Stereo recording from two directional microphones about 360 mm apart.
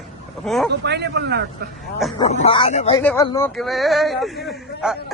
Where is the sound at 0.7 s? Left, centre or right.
Right.